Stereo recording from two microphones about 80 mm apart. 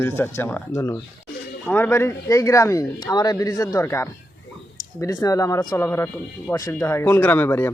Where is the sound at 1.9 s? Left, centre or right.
Left.